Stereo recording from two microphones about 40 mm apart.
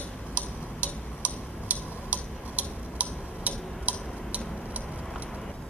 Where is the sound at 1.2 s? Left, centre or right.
Right.